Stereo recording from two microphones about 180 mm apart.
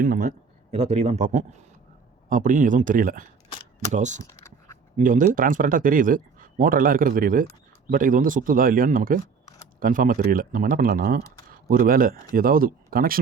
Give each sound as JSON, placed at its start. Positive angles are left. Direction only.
{"t": 0.0, "sound": "speech", "side_deg": -50}
{"t": 0.7, "sound": "a man's voice", "side_deg": -35}
{"t": 4.2, "sound": "a sound", "side_deg": 15}
{"t": 4.9, "sound": "speech", "side_deg": -45}